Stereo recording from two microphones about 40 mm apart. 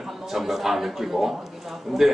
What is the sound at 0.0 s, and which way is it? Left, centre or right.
A man's voice, centre.